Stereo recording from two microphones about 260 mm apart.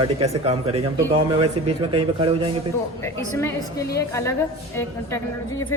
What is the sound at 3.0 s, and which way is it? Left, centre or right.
Speech, centre.